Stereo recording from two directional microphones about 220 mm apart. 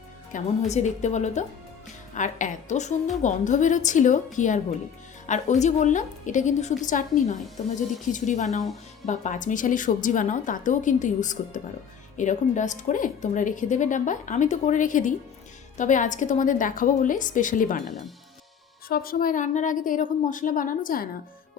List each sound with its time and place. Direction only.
0.3 s a woman's voice: 30° left (ahead or behind)
18.9 s a woman's voice: 40° left (ahead or behind)